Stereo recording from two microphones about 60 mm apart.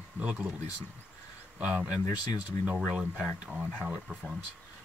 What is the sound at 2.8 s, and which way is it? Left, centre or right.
Speech, centre.